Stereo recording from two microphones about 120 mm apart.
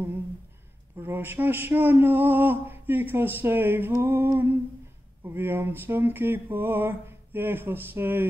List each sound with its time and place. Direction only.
0.9 s speech: 15° right (ahead or behind)